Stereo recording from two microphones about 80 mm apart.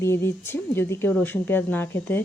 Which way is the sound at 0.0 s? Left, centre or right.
Left.